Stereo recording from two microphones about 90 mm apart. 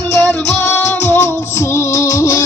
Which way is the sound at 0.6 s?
30° left (ahead or behind).